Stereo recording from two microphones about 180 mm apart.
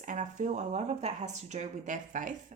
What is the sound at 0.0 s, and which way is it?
Speech, 45° right (ahead or behind).